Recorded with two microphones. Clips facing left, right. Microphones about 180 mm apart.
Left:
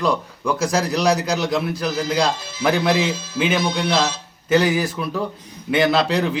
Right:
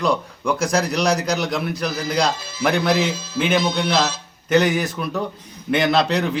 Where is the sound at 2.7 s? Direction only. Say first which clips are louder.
Left 1 dB; 10° left (ahead or behind).